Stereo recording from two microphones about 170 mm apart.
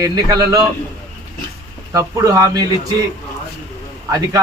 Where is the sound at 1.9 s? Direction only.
20° right (ahead or behind).